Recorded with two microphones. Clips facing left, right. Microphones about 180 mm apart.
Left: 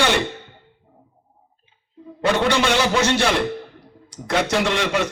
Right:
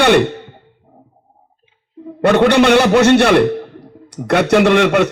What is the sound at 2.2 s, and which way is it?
A man's voice, 60° right (ahead or behind).